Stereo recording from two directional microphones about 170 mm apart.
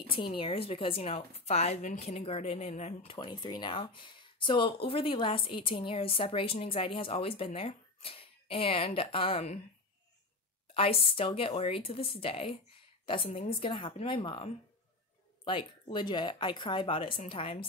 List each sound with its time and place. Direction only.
0.1 s a woman's voice: 30° left (ahead or behind)
10.7 s a woman's voice: 35° left (ahead or behind)